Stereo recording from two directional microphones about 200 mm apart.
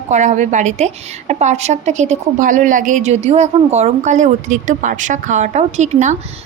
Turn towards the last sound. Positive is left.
turn(degrees=-35)  # may be behind; listen again after turning